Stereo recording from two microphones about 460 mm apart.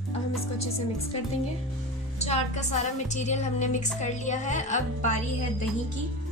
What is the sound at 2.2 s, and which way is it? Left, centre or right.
A woman's voice, centre.